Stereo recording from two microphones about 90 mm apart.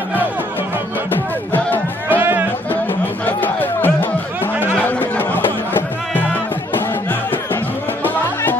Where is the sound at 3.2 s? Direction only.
20° left (ahead or behind).